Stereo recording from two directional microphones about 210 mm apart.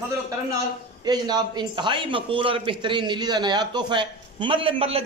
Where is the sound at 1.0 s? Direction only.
20° right (ahead or behind).